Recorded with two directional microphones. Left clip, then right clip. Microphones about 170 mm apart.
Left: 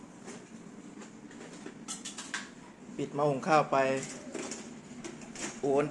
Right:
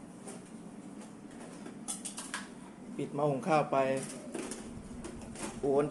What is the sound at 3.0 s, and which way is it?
Speech, centre (ahead or behind).